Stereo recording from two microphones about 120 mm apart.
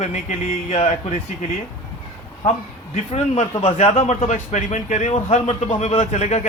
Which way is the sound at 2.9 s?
65° left (ahead or behind).